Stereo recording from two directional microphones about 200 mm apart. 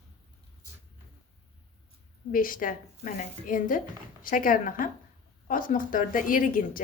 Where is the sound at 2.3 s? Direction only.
45° left (ahead or behind).